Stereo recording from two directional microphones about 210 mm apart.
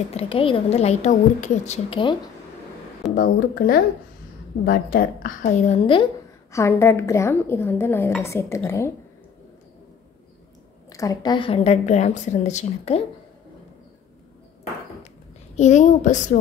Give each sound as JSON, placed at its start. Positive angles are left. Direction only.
{"t": 0.1, "sound": "a woman's voice", "side_deg": 30}
{"t": 3.2, "sound": "a woman's voice", "side_deg": 45}
{"t": 6.5, "sound": "speech", "side_deg": 15}
{"t": 10.9, "sound": "a woman's voice", "side_deg": 15}
{"t": 15.5, "sound": "a woman's voice", "side_deg": 35}